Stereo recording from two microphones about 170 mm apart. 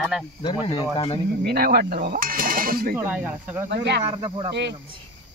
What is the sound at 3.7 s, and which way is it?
Speech, 80° right.